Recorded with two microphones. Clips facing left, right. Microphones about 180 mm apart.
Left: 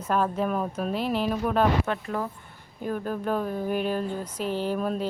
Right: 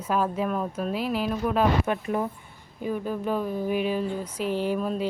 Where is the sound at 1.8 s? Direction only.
15° right (ahead or behind).